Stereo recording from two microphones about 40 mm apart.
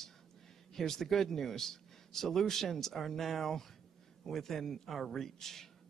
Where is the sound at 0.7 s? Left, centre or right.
Centre.